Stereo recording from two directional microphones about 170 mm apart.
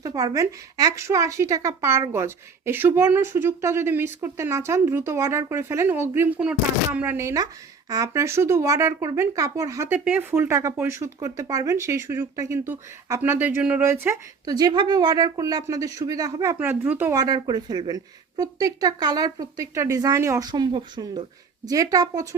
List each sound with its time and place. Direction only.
0.0 s a woman's voice: 20° right (ahead or behind)
17.2 s speech: 20° right (ahead or behind)